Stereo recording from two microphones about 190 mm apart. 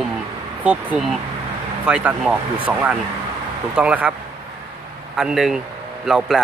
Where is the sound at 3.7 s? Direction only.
5° right (ahead or behind).